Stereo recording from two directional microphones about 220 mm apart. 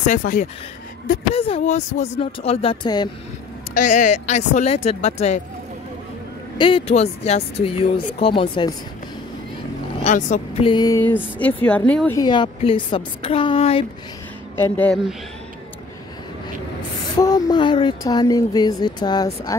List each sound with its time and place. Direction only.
0.0 s a woman's voice: 35° left (ahead or behind); by 3.1 s 20° left (ahead or behind)
3.7 s speech: 35° left (ahead or behind)
6.6 s a woman's voice: 25° left (ahead or behind)
10.0 s speech: 35° left (ahead or behind)
10.6 s speech: 20° left (ahead or behind)
12.2 s a woman's voice: 20° left (ahead or behind)
14.6 s speech: 5° left (ahead or behind)
17.2 s speech: 15° left (ahead or behind)